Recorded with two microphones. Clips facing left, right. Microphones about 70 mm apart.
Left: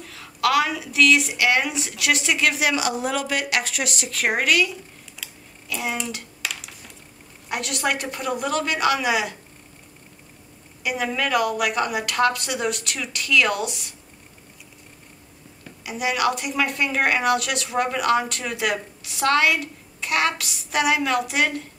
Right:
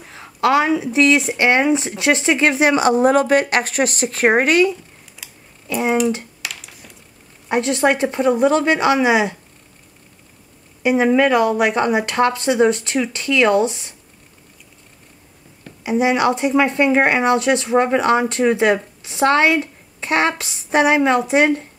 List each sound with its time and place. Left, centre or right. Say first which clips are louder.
0.0 s speech: right 5 dB; right
6.4 s coin: even; centre
7.4 s speech: right 9 dB; right
10.8 s speech: right 11 dB; right
15.8 s speech: right 7 dB; right